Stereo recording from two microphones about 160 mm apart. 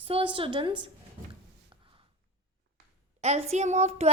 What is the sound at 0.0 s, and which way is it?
Speech, 35° right (ahead or behind).